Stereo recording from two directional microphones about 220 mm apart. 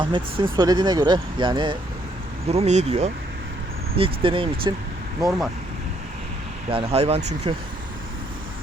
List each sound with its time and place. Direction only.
0.0 s speech: 20° right (ahead or behind)
6.7 s speech: 25° right (ahead or behind)